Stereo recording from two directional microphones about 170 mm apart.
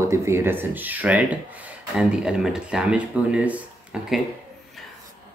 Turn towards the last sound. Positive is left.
turn(degrees=-5)  # may be behind; listen again after turning